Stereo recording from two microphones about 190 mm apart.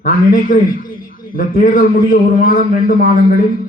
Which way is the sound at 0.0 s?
45° left (ahead or behind).